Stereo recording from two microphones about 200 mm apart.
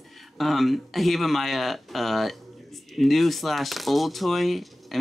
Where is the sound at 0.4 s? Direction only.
Centre (ahead or behind).